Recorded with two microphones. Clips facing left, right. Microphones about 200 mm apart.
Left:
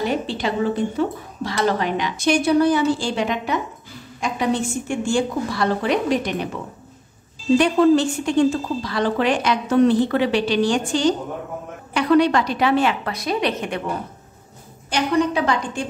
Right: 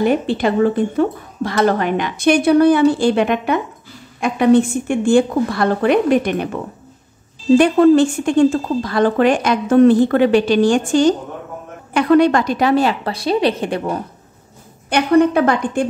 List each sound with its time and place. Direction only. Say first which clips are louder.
0.0 s a woman's voice: right 7 dB; 55° right (ahead or behind); by 13.9 s 35° right (ahead or behind)
14.9 s a woman's voice: right 7 dB; 60° right (ahead or behind)